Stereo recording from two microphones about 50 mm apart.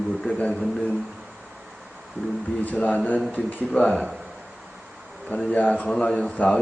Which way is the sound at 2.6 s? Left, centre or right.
Left.